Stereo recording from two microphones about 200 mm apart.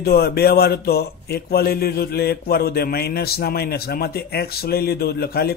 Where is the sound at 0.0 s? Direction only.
50° left (ahead or behind).